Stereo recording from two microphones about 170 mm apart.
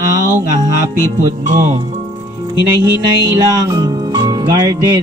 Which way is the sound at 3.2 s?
25° right (ahead or behind).